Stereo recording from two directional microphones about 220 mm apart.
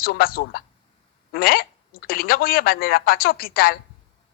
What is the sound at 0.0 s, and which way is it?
A woman's voice, 40° left (ahead or behind).